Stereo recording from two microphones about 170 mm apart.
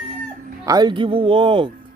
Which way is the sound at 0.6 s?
25° right (ahead or behind).